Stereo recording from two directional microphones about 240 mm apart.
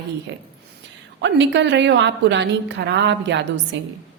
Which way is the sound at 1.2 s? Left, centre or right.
Right.